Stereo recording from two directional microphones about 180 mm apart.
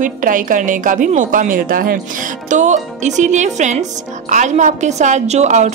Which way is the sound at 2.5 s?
40° right (ahead or behind).